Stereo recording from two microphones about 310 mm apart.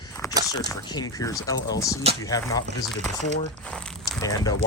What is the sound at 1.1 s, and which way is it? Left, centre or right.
Speech, centre.